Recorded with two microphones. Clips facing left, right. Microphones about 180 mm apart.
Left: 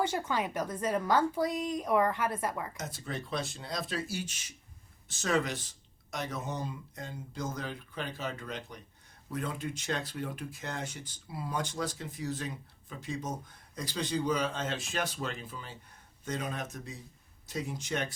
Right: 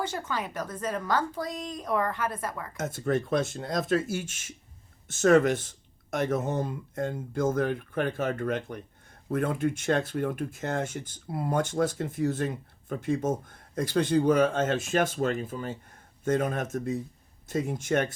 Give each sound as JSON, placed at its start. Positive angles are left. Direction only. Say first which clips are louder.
{"t": 0.0, "sound": "a woman's voice", "louder": "left 1 dB", "side_deg": 15}
{"t": 2.7, "sound": "speech", "louder": "right 11 dB", "side_deg": -50}